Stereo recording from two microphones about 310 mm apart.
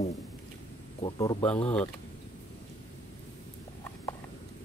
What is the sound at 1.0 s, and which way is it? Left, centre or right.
Speech, centre.